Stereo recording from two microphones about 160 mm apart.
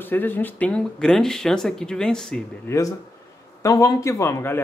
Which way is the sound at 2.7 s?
15° left (ahead or behind).